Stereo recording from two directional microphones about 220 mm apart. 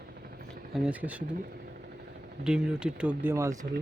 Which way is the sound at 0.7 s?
5° right (ahead or behind).